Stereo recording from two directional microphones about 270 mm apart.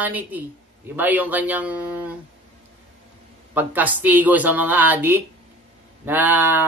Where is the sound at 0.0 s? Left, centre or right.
Centre.